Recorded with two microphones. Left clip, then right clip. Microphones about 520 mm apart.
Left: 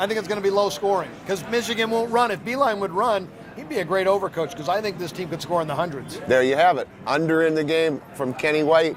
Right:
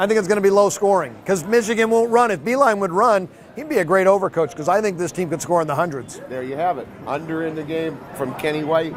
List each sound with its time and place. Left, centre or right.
0.0 s speech: right
6.3 s speech: left
8.2 s speech: left